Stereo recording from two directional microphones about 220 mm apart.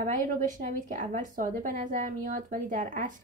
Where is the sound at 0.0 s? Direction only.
40° right (ahead or behind).